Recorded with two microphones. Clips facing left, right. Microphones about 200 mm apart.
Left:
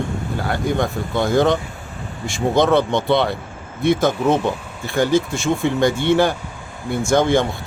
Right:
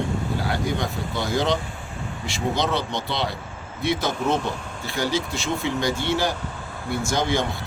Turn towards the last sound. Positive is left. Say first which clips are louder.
# left 7 dB
turn(degrees=50)  # may be behind; listen again after turning